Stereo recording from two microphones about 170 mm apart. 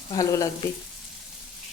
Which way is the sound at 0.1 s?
20° left (ahead or behind).